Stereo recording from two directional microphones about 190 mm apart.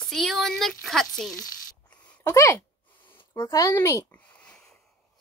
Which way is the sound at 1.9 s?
5° left (ahead or behind).